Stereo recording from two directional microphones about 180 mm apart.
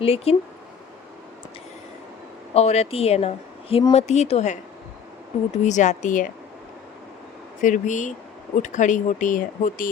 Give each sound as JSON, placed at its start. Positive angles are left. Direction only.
{"t": 0.0, "sound": "speech", "side_deg": 35}
{"t": 2.5, "sound": "speech", "side_deg": 35}
{"t": 5.6, "sound": "speech", "side_deg": 40}
{"t": 7.6, "sound": "speech", "side_deg": 45}